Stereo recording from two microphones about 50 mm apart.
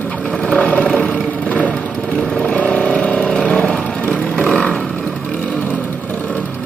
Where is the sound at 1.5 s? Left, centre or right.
Left; by 4.6 s centre.